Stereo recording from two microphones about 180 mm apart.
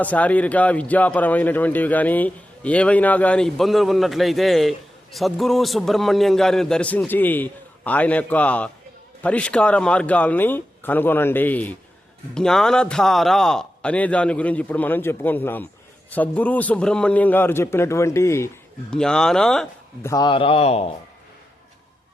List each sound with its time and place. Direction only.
0.0 s a man's voice: 10° left (ahead or behind)
18.9 s a man's voice: 5° left (ahead or behind)
20.0 s speech: 20° left (ahead or behind)